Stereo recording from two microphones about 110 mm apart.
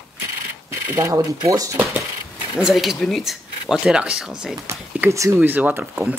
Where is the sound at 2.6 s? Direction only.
5° right (ahead or behind).